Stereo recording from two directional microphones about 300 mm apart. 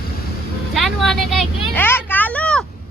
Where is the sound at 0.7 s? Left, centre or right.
Centre.